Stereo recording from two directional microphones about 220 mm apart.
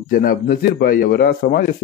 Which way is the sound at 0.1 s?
40° left (ahead or behind).